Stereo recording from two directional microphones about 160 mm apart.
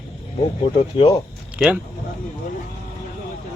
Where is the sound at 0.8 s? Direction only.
40° left (ahead or behind).